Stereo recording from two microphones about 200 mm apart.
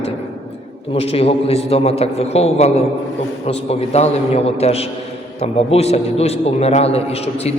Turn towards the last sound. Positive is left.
turn(degrees=30)  # may be behind; listen again after turning